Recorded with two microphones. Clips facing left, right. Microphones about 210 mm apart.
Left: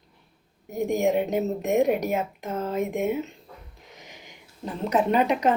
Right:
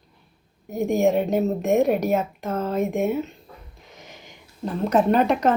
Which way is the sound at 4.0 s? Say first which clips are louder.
Right 3 dB; 15° left (ahead or behind).